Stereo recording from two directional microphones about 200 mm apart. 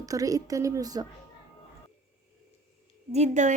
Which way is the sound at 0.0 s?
15° right (ahead or behind).